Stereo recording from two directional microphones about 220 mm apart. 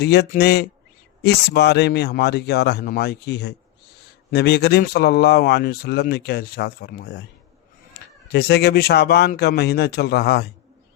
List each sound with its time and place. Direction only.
0.0 s speech: 50° left (ahead or behind)
8.3 s speech: 50° left (ahead or behind)